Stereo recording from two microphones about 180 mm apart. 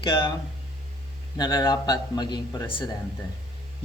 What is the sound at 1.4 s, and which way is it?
A man's voice, 20° left (ahead or behind).